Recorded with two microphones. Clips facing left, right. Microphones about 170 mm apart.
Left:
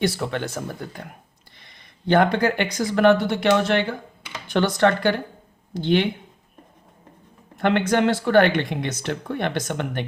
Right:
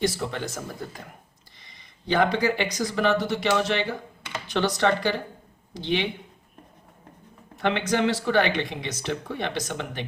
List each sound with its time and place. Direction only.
0.0 s speech: 60° left (ahead or behind)
7.5 s speech: 55° left (ahead or behind)